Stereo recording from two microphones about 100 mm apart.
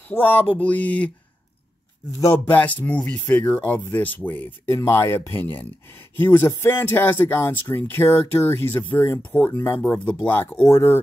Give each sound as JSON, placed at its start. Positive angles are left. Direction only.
{"t": 0.1, "sound": "speech", "side_deg": 20}
{"t": 2.1, "sound": "speech", "side_deg": 25}